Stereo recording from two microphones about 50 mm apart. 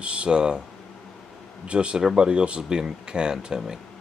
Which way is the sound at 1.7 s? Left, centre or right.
Right.